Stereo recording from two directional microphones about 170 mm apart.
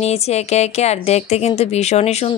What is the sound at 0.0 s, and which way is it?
Speech, 40° left (ahead or behind).